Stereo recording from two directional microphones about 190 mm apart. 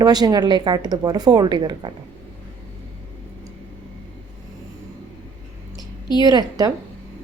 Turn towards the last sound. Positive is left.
turn(degrees=-20)  # may be behind; listen again after turning